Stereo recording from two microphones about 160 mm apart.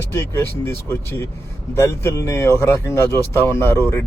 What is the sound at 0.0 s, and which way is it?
Speech, 20° left (ahead or behind).